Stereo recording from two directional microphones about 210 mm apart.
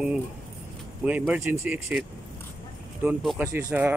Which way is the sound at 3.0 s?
5° right (ahead or behind).